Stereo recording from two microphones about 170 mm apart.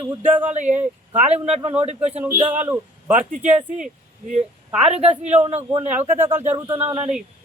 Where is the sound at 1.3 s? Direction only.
40° right (ahead or behind).